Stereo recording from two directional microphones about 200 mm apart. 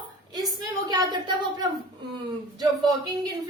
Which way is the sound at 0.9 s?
20° right (ahead or behind).